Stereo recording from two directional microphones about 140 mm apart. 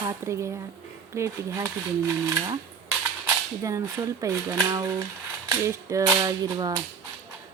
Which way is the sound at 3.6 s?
20° right (ahead or behind).